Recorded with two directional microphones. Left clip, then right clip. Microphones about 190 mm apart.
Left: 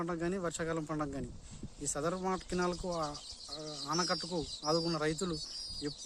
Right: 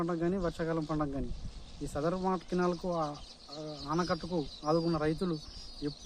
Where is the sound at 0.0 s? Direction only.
20° left (ahead or behind).